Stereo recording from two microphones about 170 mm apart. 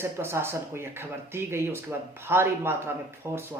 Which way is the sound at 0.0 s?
15° right (ahead or behind).